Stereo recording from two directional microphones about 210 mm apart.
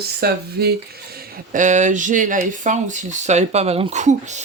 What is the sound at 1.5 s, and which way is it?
Speech, 35° right (ahead or behind).